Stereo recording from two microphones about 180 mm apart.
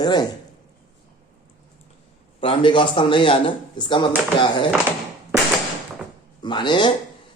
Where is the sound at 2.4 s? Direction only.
30° left (ahead or behind).